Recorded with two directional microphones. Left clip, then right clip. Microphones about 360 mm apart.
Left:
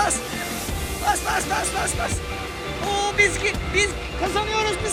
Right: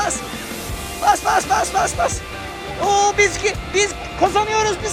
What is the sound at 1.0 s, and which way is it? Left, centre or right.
Speech, centre.